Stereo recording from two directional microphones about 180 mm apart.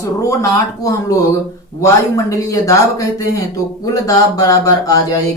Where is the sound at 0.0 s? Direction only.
15° left (ahead or behind).